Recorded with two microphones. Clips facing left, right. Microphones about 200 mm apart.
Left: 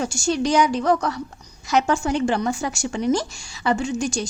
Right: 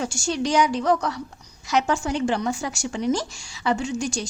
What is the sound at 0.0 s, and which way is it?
A woman's voice, 50° left (ahead or behind).